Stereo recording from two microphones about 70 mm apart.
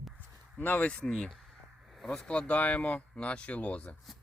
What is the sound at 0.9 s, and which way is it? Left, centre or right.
Speech, centre.